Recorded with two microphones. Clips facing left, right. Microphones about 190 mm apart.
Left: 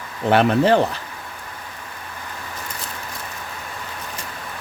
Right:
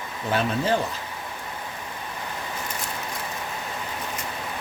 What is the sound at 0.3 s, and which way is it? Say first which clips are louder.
Speech: left 8 dB; 70° left (ahead or behind).